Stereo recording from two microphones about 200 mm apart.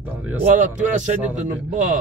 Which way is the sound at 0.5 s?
40° right (ahead or behind).